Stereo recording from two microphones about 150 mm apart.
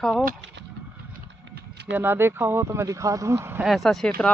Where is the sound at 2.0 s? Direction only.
15° right (ahead or behind).